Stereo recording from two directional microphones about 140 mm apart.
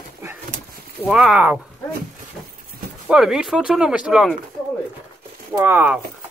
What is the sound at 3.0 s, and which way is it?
Speech, 5° right (ahead or behind).